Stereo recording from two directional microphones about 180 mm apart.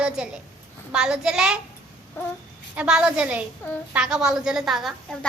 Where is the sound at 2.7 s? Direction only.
5° right (ahead or behind).